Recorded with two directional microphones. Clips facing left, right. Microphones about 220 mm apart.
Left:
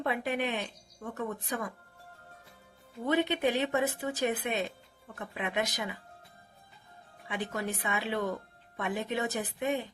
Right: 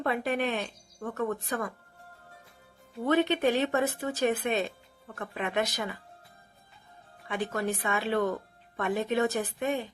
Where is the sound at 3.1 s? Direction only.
15° left (ahead or behind).